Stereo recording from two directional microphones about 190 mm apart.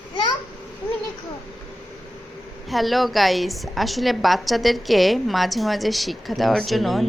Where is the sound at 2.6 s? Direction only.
Centre (ahead or behind).